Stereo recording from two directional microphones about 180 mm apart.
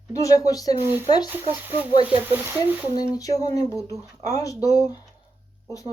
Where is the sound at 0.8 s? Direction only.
10° right (ahead or behind).